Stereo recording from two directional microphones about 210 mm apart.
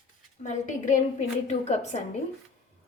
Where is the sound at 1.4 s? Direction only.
35° left (ahead or behind).